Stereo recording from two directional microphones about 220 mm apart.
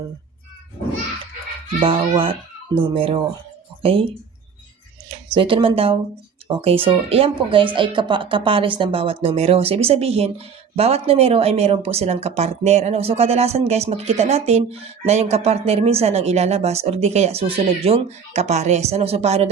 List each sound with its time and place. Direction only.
1.8 s a woman's voice: 25° right (ahead or behind)
5.3 s a woman's voice: 25° right (ahead or behind)